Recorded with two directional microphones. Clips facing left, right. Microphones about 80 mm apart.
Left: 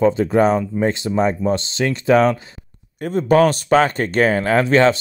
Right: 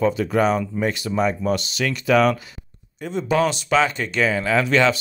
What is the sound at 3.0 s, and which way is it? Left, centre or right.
Speech, left.